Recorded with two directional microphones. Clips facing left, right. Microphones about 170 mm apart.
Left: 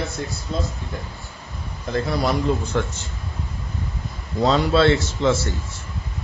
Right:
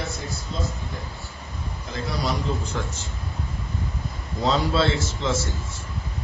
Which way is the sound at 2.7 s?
65° left (ahead or behind).